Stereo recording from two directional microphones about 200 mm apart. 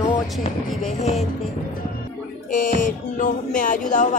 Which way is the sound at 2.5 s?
40° left (ahead or behind).